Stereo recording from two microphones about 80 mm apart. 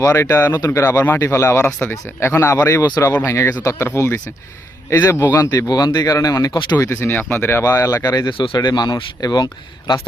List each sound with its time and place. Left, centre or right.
0.0 s speech: left
0.5 s speech: left
0.8 s speech: left
6.5 s speech: left
6.7 s speech: left
7.6 s speech: left
8.5 s speech: left